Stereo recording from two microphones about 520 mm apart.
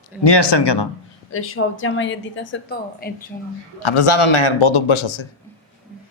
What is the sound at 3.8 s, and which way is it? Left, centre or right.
A man's voice, left.